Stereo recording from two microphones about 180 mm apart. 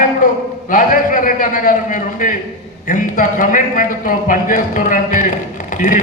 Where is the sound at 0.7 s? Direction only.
50° left (ahead or behind).